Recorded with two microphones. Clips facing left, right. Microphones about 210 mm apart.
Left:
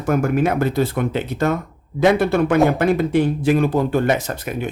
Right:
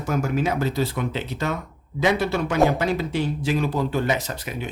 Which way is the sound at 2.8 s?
55° left (ahead or behind).